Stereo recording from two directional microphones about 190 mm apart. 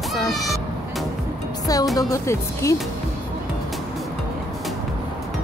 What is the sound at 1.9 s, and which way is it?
Speech, 15° left (ahead or behind).